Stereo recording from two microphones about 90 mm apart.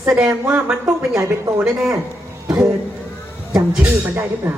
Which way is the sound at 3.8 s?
25° right (ahead or behind).